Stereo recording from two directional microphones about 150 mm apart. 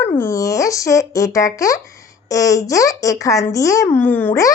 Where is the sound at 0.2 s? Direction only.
20° left (ahead or behind).